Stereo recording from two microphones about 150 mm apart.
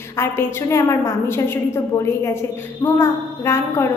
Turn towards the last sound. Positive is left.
turn(degrees=20)  # may be behind; listen again after turning